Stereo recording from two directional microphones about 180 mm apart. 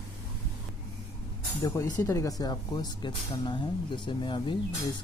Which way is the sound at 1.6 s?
20° left (ahead or behind).